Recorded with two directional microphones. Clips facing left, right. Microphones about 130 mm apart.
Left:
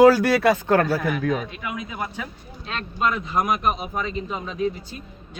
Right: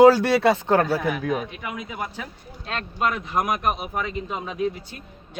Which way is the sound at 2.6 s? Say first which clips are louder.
Left 1 dB; 50° right (ahead or behind).